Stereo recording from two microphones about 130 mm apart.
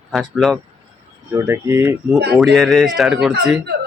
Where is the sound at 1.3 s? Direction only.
20° right (ahead or behind).